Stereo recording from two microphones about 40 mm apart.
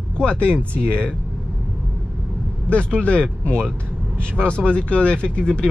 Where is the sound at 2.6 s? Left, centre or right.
Left.